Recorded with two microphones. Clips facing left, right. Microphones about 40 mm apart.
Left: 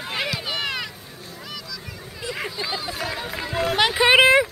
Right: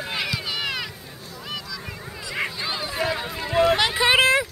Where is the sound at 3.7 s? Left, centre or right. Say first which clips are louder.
Left 3 dB; centre.